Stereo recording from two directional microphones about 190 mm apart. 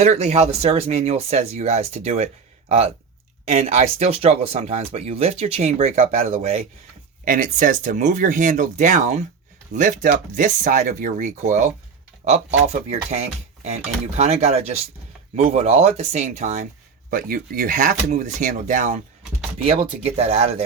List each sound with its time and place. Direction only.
0.0 s speech: 35° right (ahead or behind)
19.6 s speech: 30° right (ahead or behind)